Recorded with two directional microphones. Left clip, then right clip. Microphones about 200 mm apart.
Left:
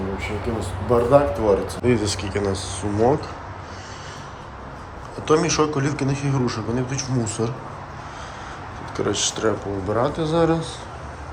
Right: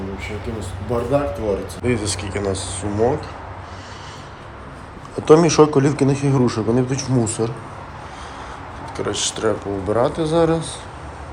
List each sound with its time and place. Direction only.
0.9 s speech: 5° left (ahead or behind)
1.9 s a man's voice: 15° left (ahead or behind)
5.2 s a man's voice: 5° left (ahead or behind)
9.0 s speech: 25° left (ahead or behind)
9.5 s a man's voice: 5° left (ahead or behind)
10.1 s a man's voice: 15° left (ahead or behind)